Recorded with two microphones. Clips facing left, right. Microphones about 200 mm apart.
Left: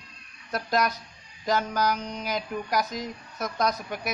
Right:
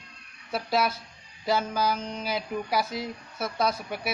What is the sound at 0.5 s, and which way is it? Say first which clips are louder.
A woman's voice: even; 5° right (ahead or behind).